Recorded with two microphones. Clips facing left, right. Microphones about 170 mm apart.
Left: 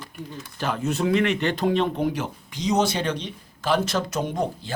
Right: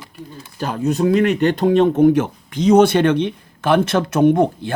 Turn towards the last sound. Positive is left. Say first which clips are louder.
# right 13 dB
turn(degrees=-60)  # may be behind; listen again after turning